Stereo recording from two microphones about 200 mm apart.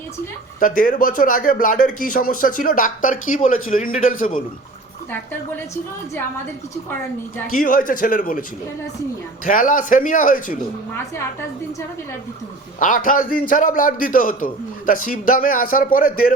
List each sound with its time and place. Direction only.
0.6 s a man's voice: 45° left (ahead or behind)
7.5 s a man's voice: 45° left (ahead or behind)
12.8 s a man's voice: 40° left (ahead or behind)